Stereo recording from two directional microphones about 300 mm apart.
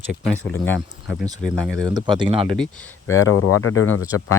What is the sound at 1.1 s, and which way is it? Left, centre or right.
Speech, centre.